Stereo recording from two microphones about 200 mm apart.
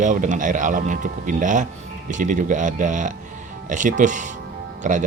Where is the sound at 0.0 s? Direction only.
40° right (ahead or behind).